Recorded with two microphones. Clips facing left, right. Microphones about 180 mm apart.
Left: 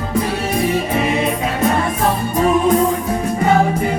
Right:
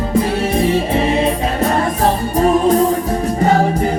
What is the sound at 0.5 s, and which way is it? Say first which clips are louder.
Music: right 2 dB; 30° right (ahead or behind).